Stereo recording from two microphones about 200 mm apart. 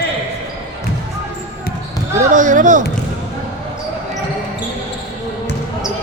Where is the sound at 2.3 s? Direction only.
40° right (ahead or behind).